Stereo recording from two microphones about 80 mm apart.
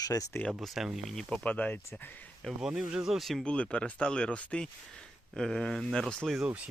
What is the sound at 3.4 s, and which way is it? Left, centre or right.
Speech, centre.